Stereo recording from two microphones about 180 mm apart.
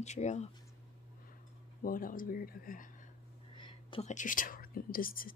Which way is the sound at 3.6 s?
30° left (ahead or behind).